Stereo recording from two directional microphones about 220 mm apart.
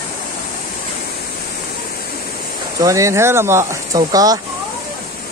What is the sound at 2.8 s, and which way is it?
Speech, 15° right (ahead or behind).